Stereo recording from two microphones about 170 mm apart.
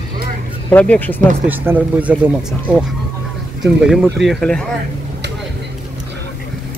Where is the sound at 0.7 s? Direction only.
10° left (ahead or behind).